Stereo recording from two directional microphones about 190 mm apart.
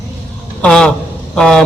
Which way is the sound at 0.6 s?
5° left (ahead or behind).